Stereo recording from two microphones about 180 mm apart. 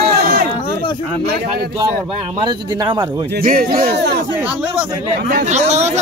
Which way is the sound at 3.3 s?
55° right (ahead or behind).